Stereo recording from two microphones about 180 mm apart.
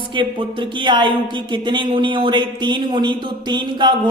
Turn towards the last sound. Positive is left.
turn(degrees=-25)  # may be behind; listen again after turning